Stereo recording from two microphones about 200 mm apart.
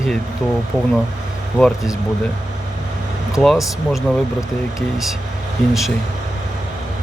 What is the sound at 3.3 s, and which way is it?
Speech, centre (ahead or behind).